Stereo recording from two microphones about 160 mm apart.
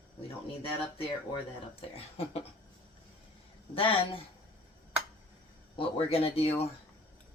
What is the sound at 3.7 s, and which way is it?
Speech, 35° left (ahead or behind).